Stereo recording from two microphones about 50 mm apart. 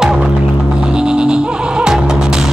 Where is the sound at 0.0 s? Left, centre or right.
Centre.